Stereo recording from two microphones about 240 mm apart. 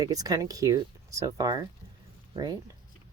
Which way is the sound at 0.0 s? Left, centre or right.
Centre.